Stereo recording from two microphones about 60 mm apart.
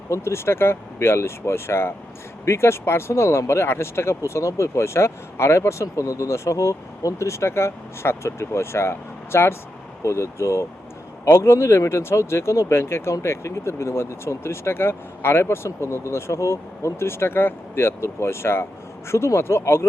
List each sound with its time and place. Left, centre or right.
0.1 s speech: left